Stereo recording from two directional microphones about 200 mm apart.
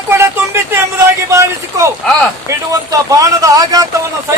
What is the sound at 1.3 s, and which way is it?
Speech, 15° right (ahead or behind).